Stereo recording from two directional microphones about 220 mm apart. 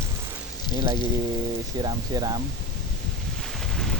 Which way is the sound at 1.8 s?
20° right (ahead or behind).